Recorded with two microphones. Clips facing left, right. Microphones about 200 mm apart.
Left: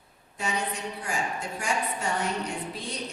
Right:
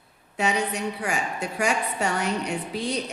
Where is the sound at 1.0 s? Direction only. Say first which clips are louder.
Right 3 dB; 75° right (ahead or behind).